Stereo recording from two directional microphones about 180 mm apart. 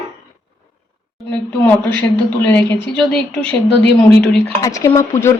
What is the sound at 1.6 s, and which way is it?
A woman's voice, 10° left (ahead or behind).